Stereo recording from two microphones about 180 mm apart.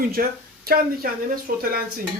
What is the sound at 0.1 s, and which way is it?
Speech, 55° right (ahead or behind).